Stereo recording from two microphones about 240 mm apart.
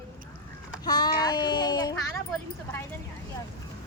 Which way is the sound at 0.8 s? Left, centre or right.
Centre.